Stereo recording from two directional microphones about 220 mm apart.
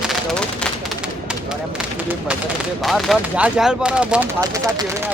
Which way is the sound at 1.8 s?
5° right (ahead or behind).